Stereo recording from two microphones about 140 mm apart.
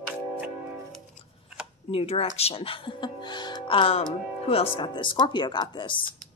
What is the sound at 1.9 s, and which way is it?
Speech, 45° left (ahead or behind).